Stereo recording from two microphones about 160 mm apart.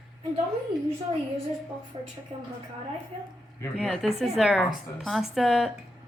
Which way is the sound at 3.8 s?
Centre (ahead or behind).